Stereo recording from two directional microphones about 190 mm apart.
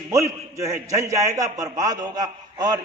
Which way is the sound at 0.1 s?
15° right (ahead or behind).